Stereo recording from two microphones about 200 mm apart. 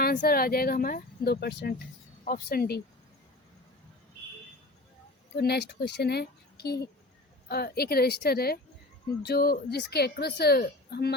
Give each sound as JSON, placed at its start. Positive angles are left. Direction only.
{"t": 0.0, "sound": "a woman's voice", "side_deg": 45}
{"t": 5.3, "sound": "a woman's voice", "side_deg": 55}